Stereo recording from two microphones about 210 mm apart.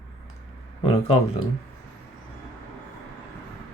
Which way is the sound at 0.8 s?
25° left (ahead or behind).